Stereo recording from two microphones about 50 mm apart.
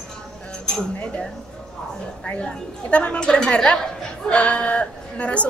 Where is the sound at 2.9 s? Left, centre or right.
Left.